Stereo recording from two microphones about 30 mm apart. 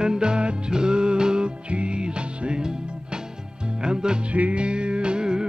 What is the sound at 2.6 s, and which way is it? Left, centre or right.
Music, right.